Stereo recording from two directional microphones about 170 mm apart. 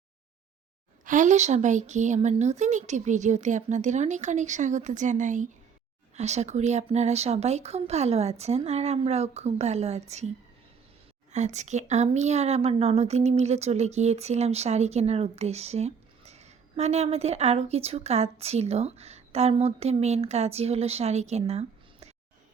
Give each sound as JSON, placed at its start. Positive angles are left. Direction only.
{"t": 1.0, "sound": "a woman's voice", "side_deg": -50}
{"t": 11.3, "sound": "a woman's voice", "side_deg": -45}